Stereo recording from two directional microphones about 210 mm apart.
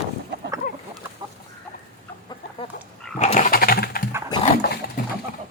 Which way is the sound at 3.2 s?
35° left (ahead or behind).